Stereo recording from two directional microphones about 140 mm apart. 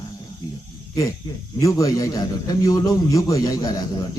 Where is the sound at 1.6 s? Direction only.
25° left (ahead or behind).